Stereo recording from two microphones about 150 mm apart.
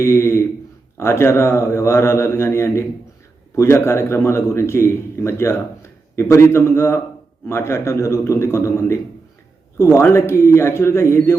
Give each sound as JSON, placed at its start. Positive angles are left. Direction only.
{"t": 0.0, "sound": "a man's voice", "side_deg": 15}